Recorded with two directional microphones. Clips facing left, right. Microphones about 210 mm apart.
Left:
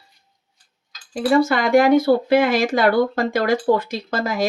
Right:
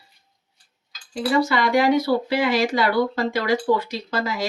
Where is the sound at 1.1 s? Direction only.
50° left (ahead or behind).